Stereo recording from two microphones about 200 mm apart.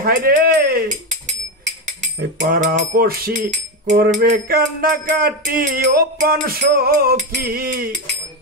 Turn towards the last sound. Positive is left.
turn(degrees=-45)  # may be behind; listen again after turning